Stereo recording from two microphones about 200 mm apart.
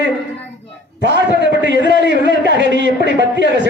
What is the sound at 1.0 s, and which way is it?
A man's voice, 65° right (ahead or behind).